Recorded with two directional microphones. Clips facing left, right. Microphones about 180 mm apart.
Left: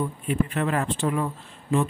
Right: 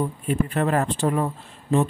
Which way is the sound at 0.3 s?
40° right (ahead or behind).